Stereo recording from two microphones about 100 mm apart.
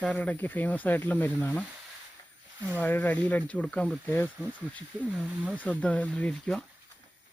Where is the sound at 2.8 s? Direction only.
15° left (ahead or behind).